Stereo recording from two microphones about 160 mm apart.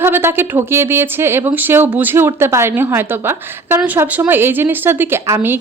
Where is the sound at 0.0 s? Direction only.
15° right (ahead or behind).